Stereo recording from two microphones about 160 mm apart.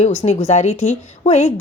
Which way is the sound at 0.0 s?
45° left (ahead or behind).